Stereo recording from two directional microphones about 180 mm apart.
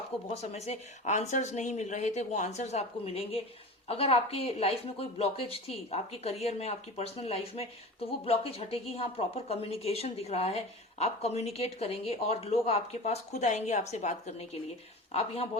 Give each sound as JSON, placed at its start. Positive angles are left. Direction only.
{"t": 0.1, "sound": "speech", "side_deg": 0}
{"t": 0.5, "sound": "speech", "side_deg": 35}